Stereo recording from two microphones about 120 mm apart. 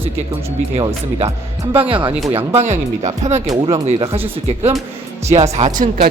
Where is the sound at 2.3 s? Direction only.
65° right (ahead or behind).